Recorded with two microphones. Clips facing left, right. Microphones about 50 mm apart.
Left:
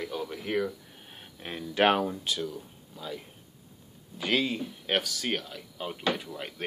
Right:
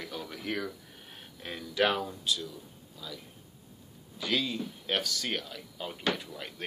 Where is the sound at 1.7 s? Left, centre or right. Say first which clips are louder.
Left 4 dB; left.